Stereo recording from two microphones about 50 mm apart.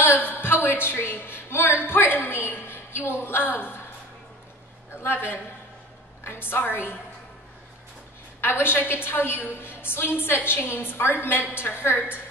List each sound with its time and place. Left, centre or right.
0.0 s a woman's voice: left
5.0 s a woman's voice: left
8.4 s a woman's voice: left